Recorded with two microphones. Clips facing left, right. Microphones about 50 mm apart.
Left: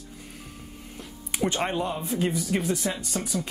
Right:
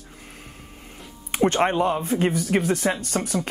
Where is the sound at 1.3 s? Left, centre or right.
Right.